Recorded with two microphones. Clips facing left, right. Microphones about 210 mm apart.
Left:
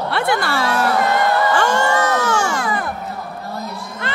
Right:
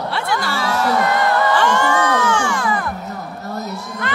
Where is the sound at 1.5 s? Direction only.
40° left (ahead or behind).